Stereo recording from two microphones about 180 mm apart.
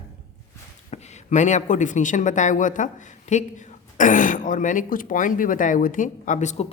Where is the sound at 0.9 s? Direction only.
40° left (ahead or behind).